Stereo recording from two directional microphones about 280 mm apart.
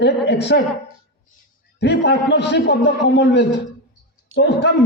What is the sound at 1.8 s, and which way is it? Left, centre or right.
A man's voice, left.